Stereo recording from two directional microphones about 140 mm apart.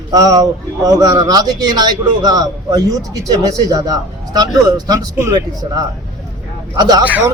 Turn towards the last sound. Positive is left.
turn(degrees=-10)  # may be behind; listen again after turning